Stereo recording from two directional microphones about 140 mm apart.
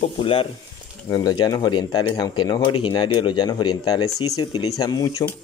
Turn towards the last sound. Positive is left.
turn(degrees=25)  # may be behind; listen again after turning